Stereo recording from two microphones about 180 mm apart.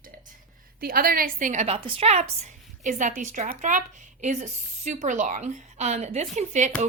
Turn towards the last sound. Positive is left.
turn(degrees=-45)  # may be behind; listen again after turning